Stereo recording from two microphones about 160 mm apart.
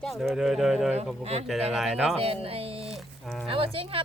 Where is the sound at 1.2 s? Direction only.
40° right (ahead or behind).